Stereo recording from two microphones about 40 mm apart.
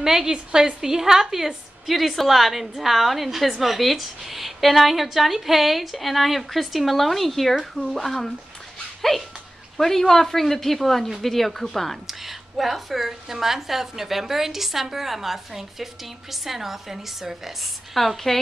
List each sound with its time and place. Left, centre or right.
0.0 s a woman's voice: centre
9.8 s a woman's voice: centre
12.1 s a woman's voice: centre
17.9 s a woman's voice: centre